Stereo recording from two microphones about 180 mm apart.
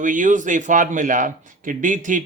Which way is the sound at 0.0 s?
45° right (ahead or behind).